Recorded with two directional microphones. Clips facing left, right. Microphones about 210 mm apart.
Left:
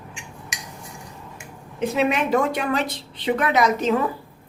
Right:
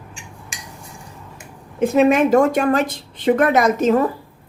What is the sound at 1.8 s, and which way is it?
A woman's voice, 45° right (ahead or behind).